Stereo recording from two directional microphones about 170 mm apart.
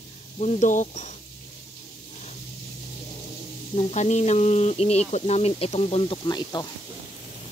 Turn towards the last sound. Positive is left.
turn(degrees=25)  # may be behind; listen again after turning